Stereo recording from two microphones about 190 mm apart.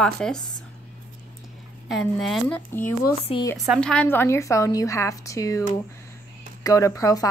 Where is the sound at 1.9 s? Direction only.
Centre (ahead or behind).